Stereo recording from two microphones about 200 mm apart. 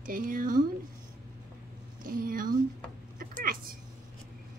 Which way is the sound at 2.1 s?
45° right (ahead or behind).